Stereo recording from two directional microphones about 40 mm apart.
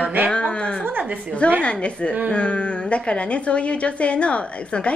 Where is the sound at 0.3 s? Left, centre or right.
Left.